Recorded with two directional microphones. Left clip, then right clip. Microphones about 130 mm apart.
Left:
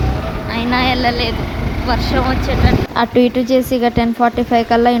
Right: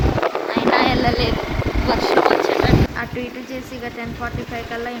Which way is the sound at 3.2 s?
55° left (ahead or behind).